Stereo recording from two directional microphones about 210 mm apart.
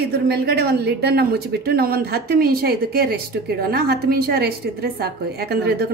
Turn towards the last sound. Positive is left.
turn(degrees=-50)  # may be behind; listen again after turning